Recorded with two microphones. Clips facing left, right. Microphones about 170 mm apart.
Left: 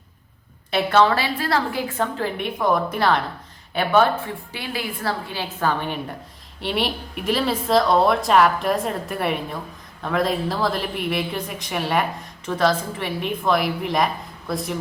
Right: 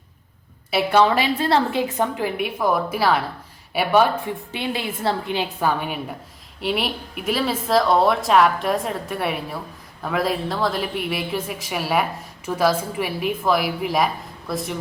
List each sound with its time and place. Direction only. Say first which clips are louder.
0.7 s a woman's voice: even; 10° right (ahead or behind)
4.5 s a woman's voice: right 3 dB; 25° right (ahead or behind); by 14.8 s centre (ahead or behind)